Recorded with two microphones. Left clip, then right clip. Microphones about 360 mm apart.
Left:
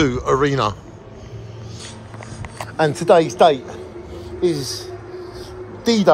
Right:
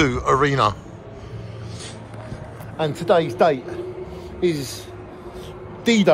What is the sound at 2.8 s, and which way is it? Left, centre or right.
Speech, left.